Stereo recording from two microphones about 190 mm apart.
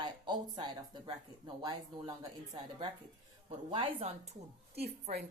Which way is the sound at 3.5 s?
25° right (ahead or behind).